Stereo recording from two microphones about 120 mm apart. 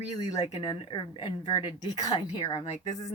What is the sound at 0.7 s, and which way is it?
A woman's voice, 45° left (ahead or behind).